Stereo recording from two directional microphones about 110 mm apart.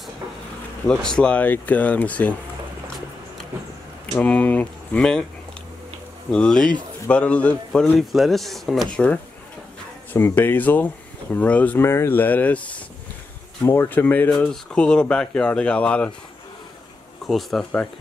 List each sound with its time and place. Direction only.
0.8 s speech: 5° left (ahead or behind)
4.2 s speech: 15° left (ahead or behind)
6.3 s speech: 5° left (ahead or behind)
8.9 s speech: 10° left (ahead or behind)
17.3 s speech: centre (ahead or behind)